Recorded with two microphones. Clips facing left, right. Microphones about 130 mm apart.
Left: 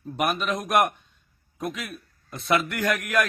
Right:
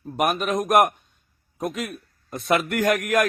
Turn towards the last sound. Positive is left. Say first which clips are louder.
# right 4 dB
turn(degrees=-50)  # may be behind; listen again after turning